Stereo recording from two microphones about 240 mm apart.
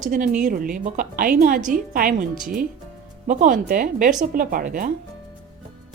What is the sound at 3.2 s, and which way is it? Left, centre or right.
A woman's voice, right.